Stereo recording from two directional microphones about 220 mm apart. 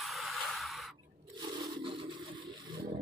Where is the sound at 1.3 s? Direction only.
20° right (ahead or behind).